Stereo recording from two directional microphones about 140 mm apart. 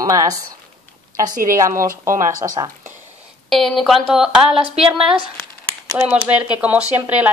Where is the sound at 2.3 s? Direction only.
25° right (ahead or behind).